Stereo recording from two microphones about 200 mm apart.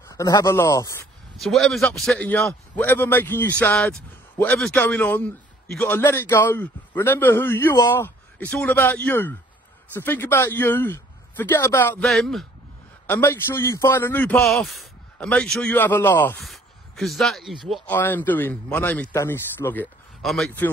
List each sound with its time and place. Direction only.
0.0 s a man's voice: 15° left (ahead or behind)
1.4 s a man's voice: centre (ahead or behind)